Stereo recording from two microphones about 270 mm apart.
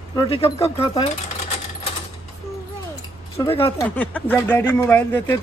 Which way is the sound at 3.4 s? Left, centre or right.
Centre.